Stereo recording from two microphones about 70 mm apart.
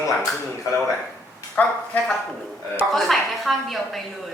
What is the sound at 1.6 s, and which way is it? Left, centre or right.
Speech, left.